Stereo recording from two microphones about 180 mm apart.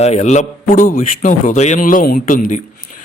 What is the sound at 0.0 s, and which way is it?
A man's voice, 40° left (ahead or behind).